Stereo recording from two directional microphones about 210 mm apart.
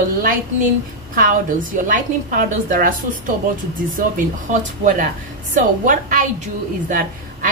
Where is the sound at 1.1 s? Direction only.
40° right (ahead or behind).